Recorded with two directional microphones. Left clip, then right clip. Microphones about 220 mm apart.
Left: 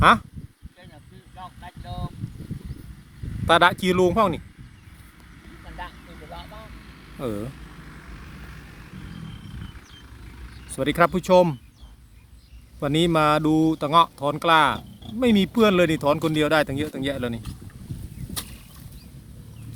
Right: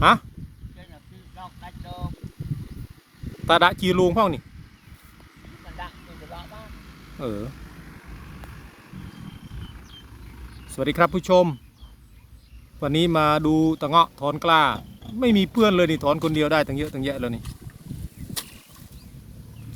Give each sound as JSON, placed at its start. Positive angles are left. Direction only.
{"t": 0.0, "sound": "speech", "side_deg": 0}
{"t": 1.4, "sound": "vehicle", "side_deg": 0}
{"t": 3.4, "sound": "speech", "side_deg": 0}
{"t": 5.8, "sound": "vehicle", "side_deg": 10}
{"t": 6.7, "sound": "vehicle", "side_deg": -55}
{"t": 7.2, "sound": "speech", "side_deg": 5}
{"t": 7.5, "sound": "vehicle", "side_deg": -50}
{"t": 10.7, "sound": "speech", "side_deg": 0}
{"t": 12.8, "sound": "speech", "side_deg": 0}